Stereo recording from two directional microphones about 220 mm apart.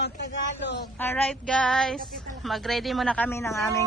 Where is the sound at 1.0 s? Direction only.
5° left (ahead or behind).